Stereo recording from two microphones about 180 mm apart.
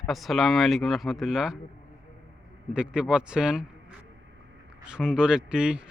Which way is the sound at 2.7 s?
5° right (ahead or behind).